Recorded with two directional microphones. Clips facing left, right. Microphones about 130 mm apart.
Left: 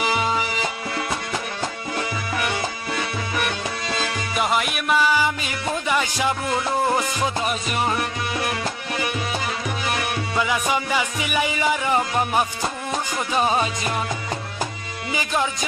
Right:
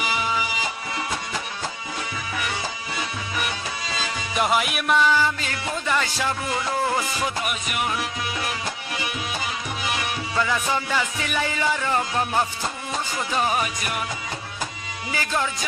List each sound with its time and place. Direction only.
3.4 s music: 55° left (ahead or behind)
4.4 s music: centre (ahead or behind); by 6.3 s 15° left (ahead or behind)
7.2 s music: 30° left (ahead or behind)
10.3 s music: 15° left (ahead or behind)
15.1 s music: 20° left (ahead or behind)